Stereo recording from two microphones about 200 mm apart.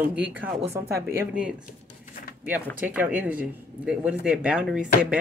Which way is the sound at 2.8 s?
10° right (ahead or behind).